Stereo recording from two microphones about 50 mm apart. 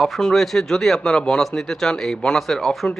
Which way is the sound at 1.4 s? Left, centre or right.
Centre.